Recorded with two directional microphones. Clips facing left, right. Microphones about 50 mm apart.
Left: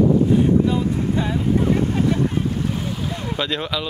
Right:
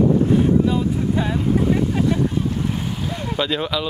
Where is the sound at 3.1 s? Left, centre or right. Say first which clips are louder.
Right 4 dB; centre.